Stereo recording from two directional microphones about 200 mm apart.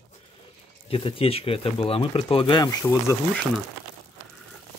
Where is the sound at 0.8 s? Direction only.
25° left (ahead or behind).